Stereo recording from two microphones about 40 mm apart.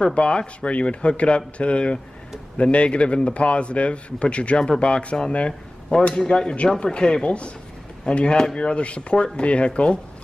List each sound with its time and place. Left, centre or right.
0.0 s a man's voice: left